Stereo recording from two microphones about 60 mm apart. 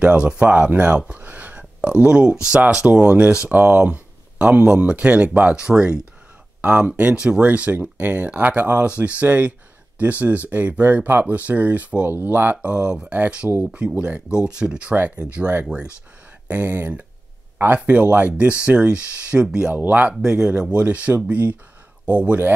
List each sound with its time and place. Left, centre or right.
0.0 s speech: centre
0.9 s a sound: centre
2.7 s speech: centre; by 8.8 s right
8.8 s speech: right
12.6 s speech: right
16.4 s speech: right
17.7 s speech: centre
19.7 s speech: right
20.2 s speech: centre